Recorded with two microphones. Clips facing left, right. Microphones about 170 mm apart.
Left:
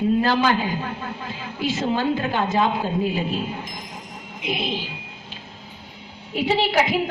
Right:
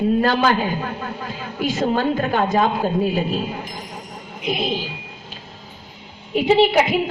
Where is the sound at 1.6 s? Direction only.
50° right (ahead or behind).